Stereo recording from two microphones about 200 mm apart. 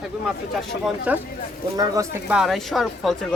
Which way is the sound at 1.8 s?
15° right (ahead or behind).